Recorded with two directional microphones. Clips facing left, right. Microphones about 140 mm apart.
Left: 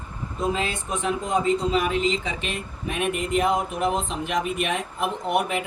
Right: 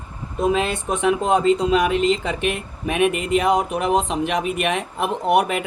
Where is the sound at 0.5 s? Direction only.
70° right (ahead or behind).